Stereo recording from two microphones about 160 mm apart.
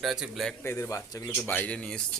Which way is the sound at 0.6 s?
15° left (ahead or behind).